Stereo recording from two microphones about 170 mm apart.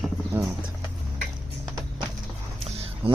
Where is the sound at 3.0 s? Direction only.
35° right (ahead or behind).